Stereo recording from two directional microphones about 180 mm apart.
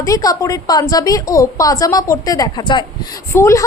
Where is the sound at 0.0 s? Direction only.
20° left (ahead or behind).